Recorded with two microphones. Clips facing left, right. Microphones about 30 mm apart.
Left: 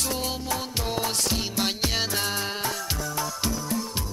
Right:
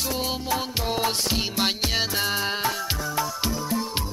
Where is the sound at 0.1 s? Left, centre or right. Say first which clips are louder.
Right 2 dB; centre.